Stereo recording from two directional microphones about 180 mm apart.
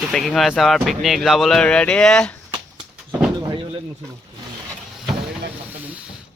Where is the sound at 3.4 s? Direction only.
25° right (ahead or behind).